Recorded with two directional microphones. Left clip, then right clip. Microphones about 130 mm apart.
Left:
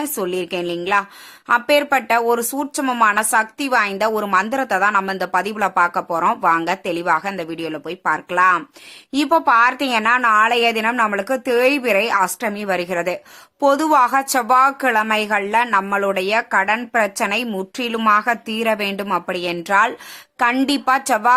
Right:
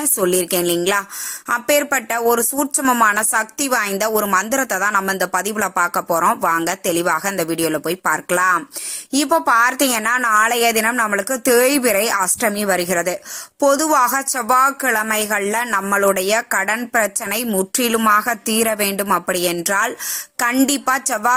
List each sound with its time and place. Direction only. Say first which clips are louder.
0.0 s a woman's voice: right 4 dB; 40° right (ahead or behind)
9.1 s a woman's voice: left 1 dB; 25° right (ahead or behind)